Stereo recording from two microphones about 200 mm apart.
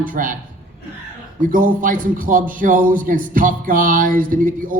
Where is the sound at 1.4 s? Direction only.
45° right (ahead or behind).